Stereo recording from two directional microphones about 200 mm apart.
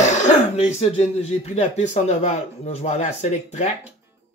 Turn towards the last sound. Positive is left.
turn(degrees=35)  # may be behind; listen again after turning